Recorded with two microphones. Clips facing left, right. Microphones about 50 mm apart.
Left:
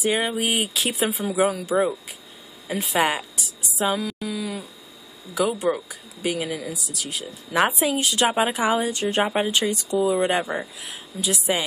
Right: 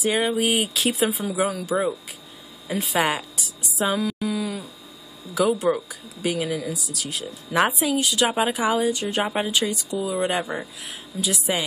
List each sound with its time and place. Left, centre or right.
0.0 s a woman's voice: centre
2.7 s speech: centre
3.8 s a sound: centre
5.5 s speech: centre
7.8 s a woman's voice: centre
9.5 s speech: left
9.9 s a woman's voice: centre